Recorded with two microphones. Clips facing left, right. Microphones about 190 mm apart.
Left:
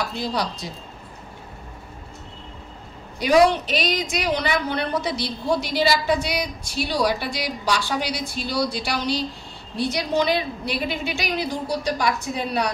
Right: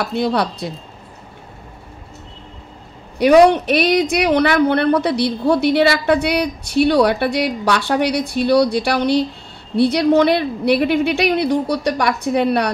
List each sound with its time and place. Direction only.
0.1 s speech: 60° right (ahead or behind)
3.2 s speech: 65° right (ahead or behind)